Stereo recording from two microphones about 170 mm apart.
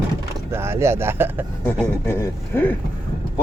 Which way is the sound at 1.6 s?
15° left (ahead or behind).